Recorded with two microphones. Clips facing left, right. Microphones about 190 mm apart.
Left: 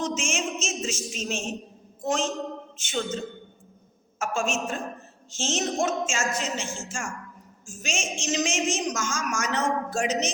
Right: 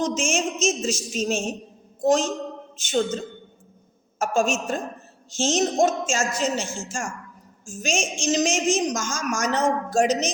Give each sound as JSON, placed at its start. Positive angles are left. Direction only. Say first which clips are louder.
{"t": 0.0, "sound": "a woman's voice", "louder": "right 5 dB", "side_deg": -35}